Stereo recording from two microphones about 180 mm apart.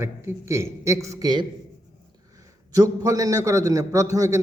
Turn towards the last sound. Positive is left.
turn(degrees=-15)  # may be behind; listen again after turning